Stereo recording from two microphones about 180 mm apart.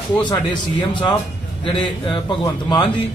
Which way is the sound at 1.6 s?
25° left (ahead or behind).